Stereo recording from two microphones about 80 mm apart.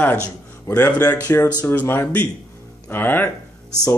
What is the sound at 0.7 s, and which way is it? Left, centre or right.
A man's voice, left.